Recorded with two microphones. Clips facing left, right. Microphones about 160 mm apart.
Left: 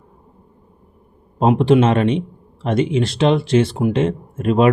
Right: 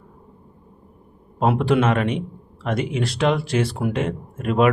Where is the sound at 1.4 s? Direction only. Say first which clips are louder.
Left 5 dB; 25° left (ahead or behind).